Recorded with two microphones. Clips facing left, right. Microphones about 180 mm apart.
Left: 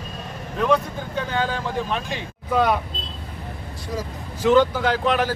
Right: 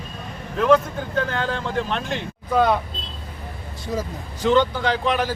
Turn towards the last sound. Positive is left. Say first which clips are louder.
# left 1 dB
turn(degrees=0)  # may be behind; listen again after turning